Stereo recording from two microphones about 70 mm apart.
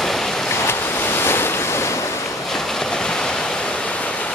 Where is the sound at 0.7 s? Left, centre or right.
Left.